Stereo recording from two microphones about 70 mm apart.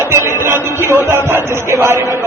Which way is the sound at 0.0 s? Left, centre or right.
Right.